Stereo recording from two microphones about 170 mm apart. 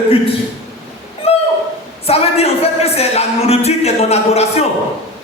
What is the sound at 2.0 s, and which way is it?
Speech, 35° left (ahead or behind).